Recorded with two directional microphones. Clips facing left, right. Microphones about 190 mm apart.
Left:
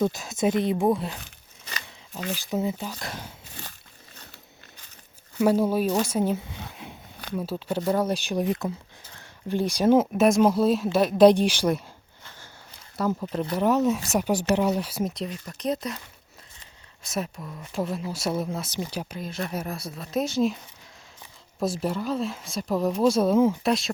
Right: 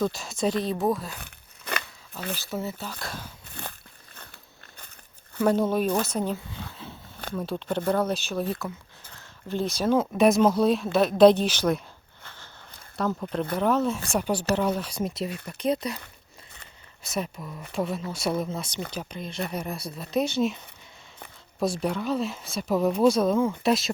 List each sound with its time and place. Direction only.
0.0 s speech: 20° left (ahead or behind)
1.2 s a sound: 60° right (ahead or behind)
2.1 s speech: 15° left (ahead or behind)
3.5 s a sound: 55° right (ahead or behind)
5.4 s speech: 10° left (ahead or behind)
6.3 s a sound: 20° left (ahead or behind)
7.3 s speech: 10° left (ahead or behind)
10.2 s speech: centre (ahead or behind)
13.0 s speech: 5° left (ahead or behind)
17.0 s speech: centre (ahead or behind)
21.6 s speech: centre (ahead or behind)